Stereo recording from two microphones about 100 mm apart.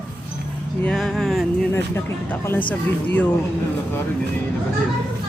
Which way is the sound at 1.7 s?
25° left (ahead or behind).